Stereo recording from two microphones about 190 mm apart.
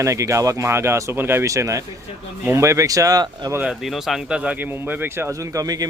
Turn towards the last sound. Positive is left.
turn(degrees=-20)  # may be behind; listen again after turning